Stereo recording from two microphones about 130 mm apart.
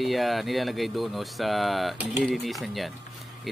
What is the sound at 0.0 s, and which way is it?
Speech, centre (ahead or behind).